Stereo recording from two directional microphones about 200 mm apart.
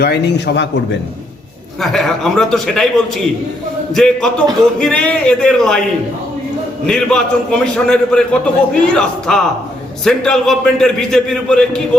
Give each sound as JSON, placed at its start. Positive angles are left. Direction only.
{"t": 0.0, "sound": "a man's voice", "side_deg": 55}
{"t": 1.8, "sound": "a man's voice", "side_deg": 0}
{"t": 6.8, "sound": "a man's voice", "side_deg": 5}